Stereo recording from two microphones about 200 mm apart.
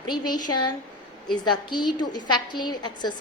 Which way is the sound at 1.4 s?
20° left (ahead or behind).